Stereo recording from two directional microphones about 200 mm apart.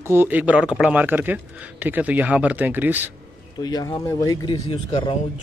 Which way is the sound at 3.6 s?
20° left (ahead or behind).